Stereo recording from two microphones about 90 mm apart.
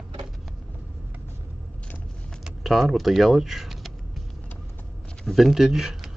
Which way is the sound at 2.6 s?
Centre (ahead or behind).